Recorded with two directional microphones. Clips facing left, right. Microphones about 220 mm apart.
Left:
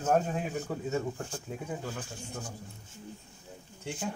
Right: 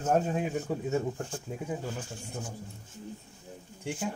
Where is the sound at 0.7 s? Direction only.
15° right (ahead or behind).